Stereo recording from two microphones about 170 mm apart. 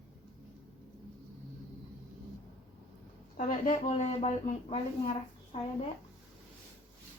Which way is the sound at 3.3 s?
45° left (ahead or behind).